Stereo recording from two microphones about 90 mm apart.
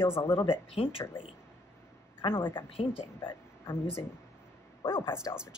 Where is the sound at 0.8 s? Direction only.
90° left.